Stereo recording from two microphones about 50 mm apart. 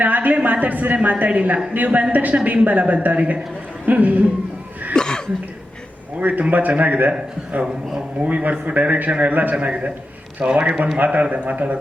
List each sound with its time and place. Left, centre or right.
0.0 s a sound: right
0.4 s a man's voice: right
4.9 s cough: centre
6.1 s a woman's voice: right
8.2 s a woman's voice: right